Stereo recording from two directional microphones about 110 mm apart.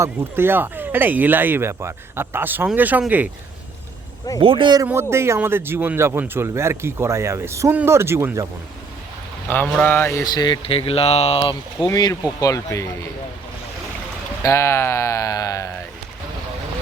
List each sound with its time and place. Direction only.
0.0 s speech: 20° right (ahead or behind)
4.4 s speech: 50° right (ahead or behind)
4.9 s speech: 20° right (ahead or behind)
9.8 s a sound: 15° left (ahead or behind)
10.1 s speech: 25° left (ahead or behind)
10.3 s speech: 40° left (ahead or behind)
10.6 s speech: 60° left (ahead or behind)
11.9 s speech: 35° left (ahead or behind)
14.4 s speech: 25° left (ahead or behind)